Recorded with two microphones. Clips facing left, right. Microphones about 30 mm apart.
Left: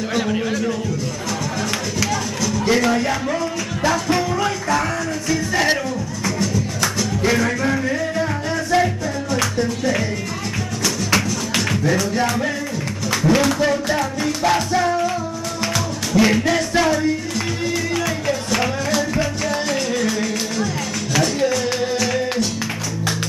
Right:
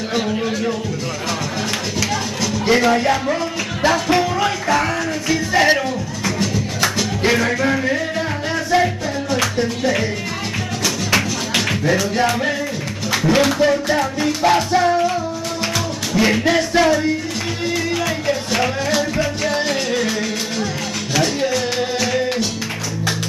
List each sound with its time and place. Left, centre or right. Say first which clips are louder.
0.4 s music: right 1 dB; centre
2.0 s music: even; right
2.7 s music: right 4 dB; centre
7.2 s music: right 2 dB; right
11.1 s music: right 2 dB; right
16.3 s music: right 2 dB; centre
19.4 s music: right 2 dB; right